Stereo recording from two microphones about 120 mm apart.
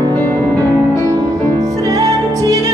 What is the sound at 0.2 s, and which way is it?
Music, 15° left (ahead or behind).